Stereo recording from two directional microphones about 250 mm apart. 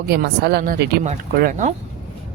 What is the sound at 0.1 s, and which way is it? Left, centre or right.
A woman's voice, right.